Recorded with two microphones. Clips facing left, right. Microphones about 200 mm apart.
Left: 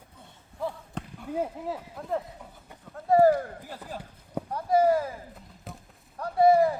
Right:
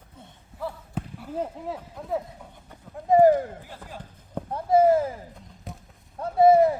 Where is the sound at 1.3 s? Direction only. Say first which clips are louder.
Left 1 dB; 5° left (ahead or behind).